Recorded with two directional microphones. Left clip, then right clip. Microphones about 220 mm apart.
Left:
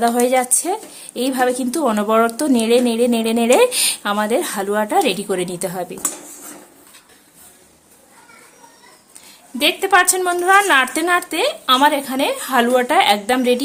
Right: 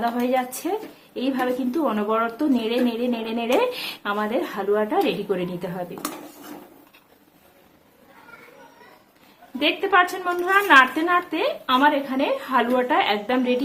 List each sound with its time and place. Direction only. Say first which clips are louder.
0.0 s a woman's voice: left 7 dB; 50° left (ahead or behind)
9.6 s a woman's voice: left 4 dB; 50° left (ahead or behind)